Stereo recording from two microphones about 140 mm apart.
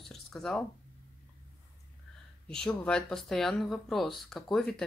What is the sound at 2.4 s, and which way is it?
Speech, 5° left (ahead or behind).